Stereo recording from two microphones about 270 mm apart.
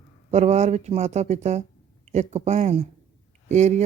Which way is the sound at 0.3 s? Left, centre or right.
Right.